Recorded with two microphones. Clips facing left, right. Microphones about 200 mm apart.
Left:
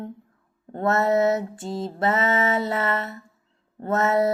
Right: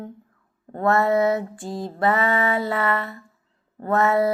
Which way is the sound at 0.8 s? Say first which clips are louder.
Right 1 dB; 25° left (ahead or behind).